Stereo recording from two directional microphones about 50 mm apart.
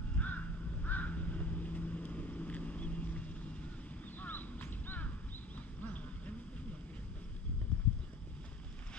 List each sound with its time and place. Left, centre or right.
0.2 s crow: left